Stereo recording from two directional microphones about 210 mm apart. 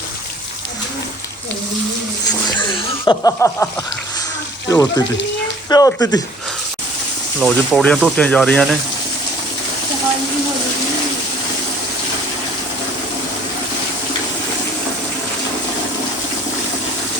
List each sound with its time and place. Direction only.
2.5 s snicker: 20° left (ahead or behind)
4.7 s speech: 15° left (ahead or behind)
7.4 s speech: 5° left (ahead or behind)